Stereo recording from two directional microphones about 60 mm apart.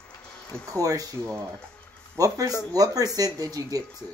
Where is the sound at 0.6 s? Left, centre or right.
Right.